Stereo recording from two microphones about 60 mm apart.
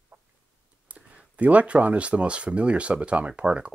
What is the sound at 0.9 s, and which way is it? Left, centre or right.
Speech, right.